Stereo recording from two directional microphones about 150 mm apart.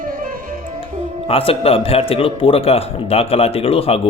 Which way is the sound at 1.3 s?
40° left (ahead or behind).